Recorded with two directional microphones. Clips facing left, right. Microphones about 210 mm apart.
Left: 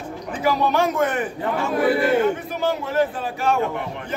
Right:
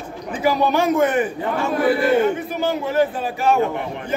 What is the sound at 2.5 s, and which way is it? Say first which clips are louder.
A man's voice: right 2 dB; centre (ahead or behind).